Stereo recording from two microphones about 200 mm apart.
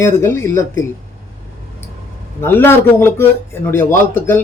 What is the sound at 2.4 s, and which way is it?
Speech, 10° left (ahead or behind).